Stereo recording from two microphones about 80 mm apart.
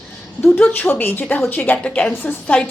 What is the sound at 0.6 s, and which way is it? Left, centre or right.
A woman's voice, left.